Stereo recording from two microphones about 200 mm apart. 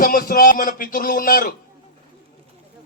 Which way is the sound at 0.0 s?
45° left (ahead or behind).